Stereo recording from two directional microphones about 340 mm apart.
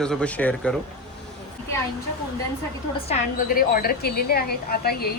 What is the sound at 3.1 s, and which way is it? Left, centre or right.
A woman's voice, left.